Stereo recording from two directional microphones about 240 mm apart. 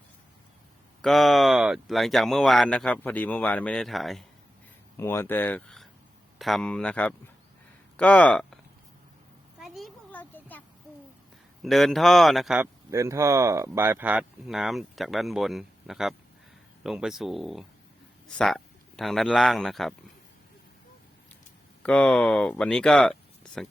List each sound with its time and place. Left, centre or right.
1.0 s speech: centre
4.9 s speech: centre
9.6 s a sound: centre
11.6 s speech: centre
12.9 s speech: centre
21.8 s speech: centre